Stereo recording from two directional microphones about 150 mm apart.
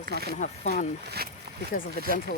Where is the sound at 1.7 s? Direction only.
70° left (ahead or behind).